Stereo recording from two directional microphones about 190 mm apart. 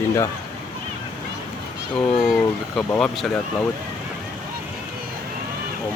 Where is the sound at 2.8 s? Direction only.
5° left (ahead or behind).